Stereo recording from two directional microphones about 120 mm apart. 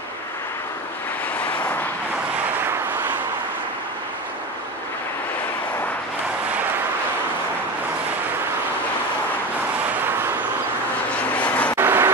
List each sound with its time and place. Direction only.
11.3 s vehicle: 10° left (ahead or behind)
11.8 s vehicle: 15° right (ahead or behind)